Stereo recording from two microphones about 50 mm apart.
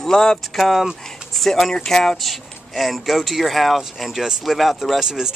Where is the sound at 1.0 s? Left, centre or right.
Centre.